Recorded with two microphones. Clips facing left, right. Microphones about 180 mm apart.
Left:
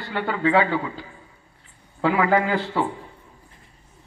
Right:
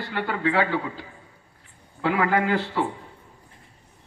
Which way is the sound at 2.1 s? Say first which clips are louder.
Left 2 dB; 55° right (ahead or behind).